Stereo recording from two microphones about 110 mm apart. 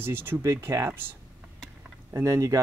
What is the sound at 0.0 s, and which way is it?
Speech, 20° right (ahead or behind).